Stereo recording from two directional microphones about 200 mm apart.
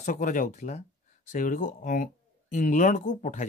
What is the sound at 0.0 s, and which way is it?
Speech, 40° left (ahead or behind).